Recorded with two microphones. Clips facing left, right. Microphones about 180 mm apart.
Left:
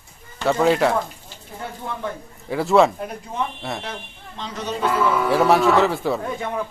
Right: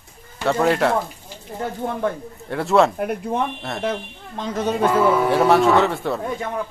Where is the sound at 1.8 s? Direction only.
45° right (ahead or behind).